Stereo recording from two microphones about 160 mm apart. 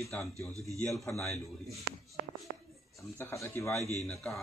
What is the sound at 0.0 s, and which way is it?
Speech, centre (ahead or behind).